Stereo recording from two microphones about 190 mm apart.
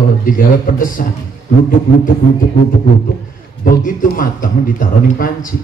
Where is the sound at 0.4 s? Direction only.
45° left (ahead or behind).